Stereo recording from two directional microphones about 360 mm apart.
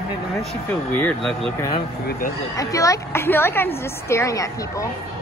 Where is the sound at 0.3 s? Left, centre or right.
Centre.